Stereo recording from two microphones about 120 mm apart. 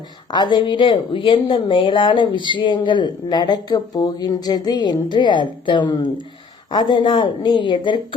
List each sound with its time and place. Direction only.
0.3 s a woman's voice: 40° left (ahead or behind)